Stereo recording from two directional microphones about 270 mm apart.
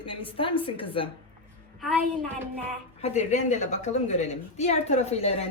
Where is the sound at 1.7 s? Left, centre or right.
Centre.